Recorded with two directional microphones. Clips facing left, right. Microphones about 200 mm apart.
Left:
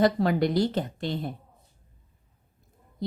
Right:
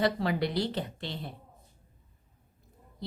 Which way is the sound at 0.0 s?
45° left (ahead or behind).